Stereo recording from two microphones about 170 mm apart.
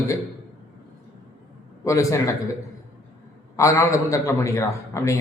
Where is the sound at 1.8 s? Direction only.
20° left (ahead or behind).